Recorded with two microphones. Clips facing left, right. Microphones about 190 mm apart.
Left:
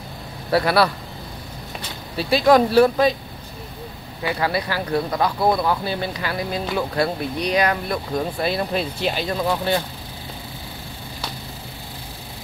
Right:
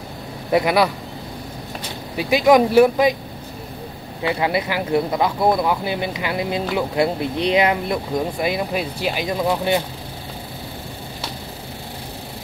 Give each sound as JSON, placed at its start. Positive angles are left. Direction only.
{"t": 0.5, "sound": "speech", "side_deg": -15}
{"t": 2.1, "sound": "speech", "side_deg": -15}
{"t": 4.3, "sound": "speech", "side_deg": -20}